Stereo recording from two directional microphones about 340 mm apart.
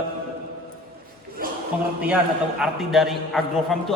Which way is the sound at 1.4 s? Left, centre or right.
Right.